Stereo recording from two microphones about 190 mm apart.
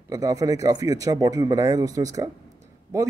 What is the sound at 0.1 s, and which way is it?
Speech, 20° right (ahead or behind).